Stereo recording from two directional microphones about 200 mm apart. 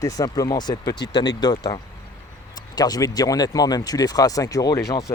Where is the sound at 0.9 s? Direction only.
55° left (ahead or behind).